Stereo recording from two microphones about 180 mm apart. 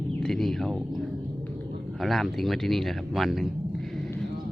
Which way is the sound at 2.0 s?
Centre (ahead or behind).